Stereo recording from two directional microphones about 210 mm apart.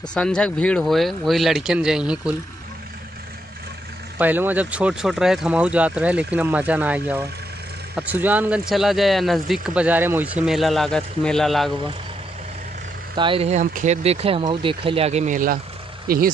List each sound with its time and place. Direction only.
0.1 s speech: 5° left (ahead or behind)
4.2 s speech: 10° right (ahead or behind)
13.1 s speech: 25° right (ahead or behind); by 16.2 s 45° right (ahead or behind)